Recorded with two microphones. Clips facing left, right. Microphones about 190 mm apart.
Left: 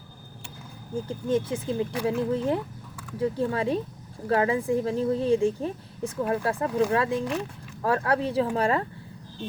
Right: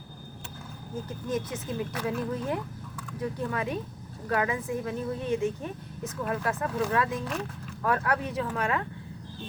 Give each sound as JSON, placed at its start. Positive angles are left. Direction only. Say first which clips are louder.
{"t": 1.0, "sound": "a woman's voice", "louder": "left 6 dB", "side_deg": 30}